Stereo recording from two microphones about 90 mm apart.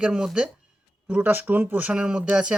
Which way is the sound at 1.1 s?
20° right (ahead or behind).